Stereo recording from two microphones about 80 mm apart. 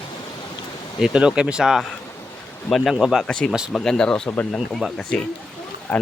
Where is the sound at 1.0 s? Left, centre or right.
Centre.